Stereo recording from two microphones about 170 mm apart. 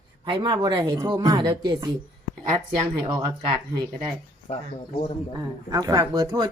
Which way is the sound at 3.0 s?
25° right (ahead or behind).